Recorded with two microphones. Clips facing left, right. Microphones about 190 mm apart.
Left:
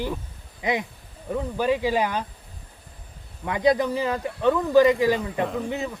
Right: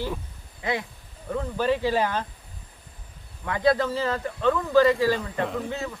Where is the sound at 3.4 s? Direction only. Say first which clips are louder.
Left 1 dB; 15° left (ahead or behind).